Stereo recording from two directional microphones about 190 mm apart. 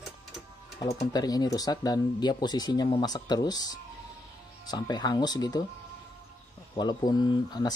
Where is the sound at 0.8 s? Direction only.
20° left (ahead or behind).